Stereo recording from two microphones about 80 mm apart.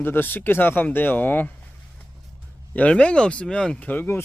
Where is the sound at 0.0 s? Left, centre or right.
Left.